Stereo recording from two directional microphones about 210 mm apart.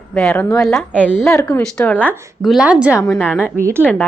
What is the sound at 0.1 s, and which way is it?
A woman's voice, 5° left (ahead or behind).